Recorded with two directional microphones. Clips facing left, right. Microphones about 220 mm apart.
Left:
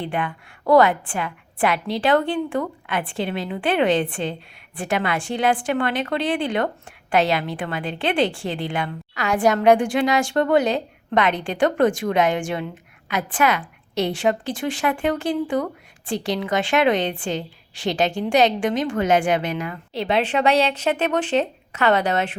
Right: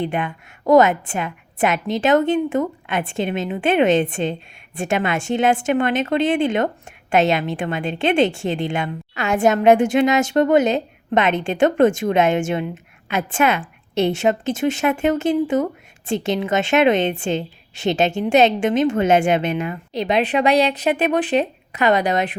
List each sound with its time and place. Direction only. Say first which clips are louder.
0.0 s speech: right 3 dB; 25° right (ahead or behind)